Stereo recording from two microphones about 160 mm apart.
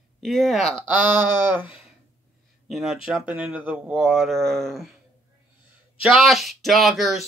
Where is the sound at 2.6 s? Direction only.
Centre (ahead or behind).